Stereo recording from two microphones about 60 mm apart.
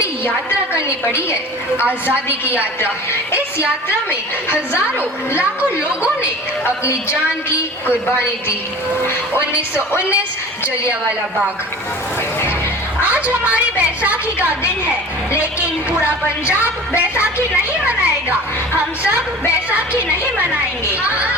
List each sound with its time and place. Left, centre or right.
0.9 s a woman's voice: left
1.7 s a woman's voice: right
13.0 s a woman's voice: right
15.9 s a woman's voice: right
17.8 s music: right
19.7 s a woman's voice: right